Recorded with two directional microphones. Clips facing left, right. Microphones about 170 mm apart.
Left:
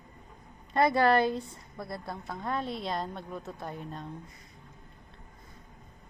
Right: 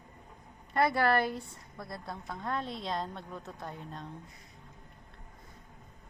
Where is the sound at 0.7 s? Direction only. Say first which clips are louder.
Left 3 dB; 15° left (ahead or behind).